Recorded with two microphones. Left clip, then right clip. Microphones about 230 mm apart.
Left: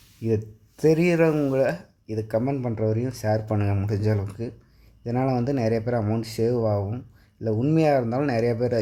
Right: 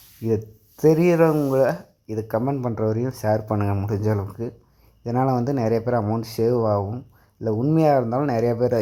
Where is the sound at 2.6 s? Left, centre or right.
Centre.